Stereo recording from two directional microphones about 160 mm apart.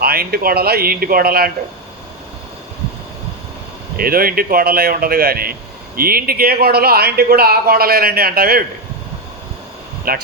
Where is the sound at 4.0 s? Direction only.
65° right (ahead or behind).